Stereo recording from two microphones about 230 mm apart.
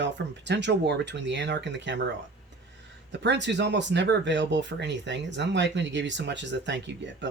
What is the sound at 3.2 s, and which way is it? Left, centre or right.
Speech, right.